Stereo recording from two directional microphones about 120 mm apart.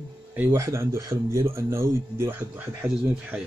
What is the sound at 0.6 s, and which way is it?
Speech, 25° right (ahead or behind).